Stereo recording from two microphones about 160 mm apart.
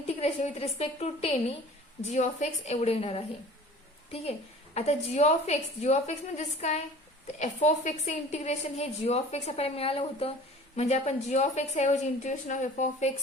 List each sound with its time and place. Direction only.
0.1 s a woman's voice: 40° left (ahead or behind)